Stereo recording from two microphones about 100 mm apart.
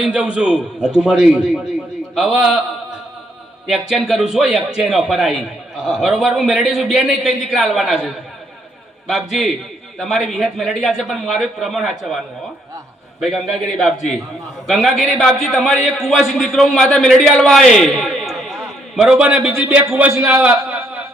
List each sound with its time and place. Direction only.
0.0 s a man's voice: 10° right (ahead or behind)
19.1 s a man's voice: 10° right (ahead or behind)
20.5 s a sound: 25° right (ahead or behind)